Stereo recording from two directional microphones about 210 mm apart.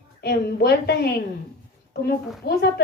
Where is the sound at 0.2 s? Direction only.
50° left (ahead or behind).